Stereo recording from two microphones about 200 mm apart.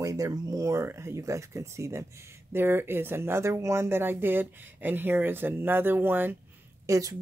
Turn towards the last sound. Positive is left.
turn(degrees=-15)  # may be behind; listen again after turning